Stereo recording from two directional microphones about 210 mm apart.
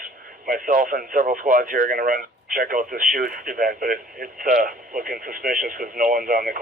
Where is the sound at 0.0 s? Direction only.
40° right (ahead or behind).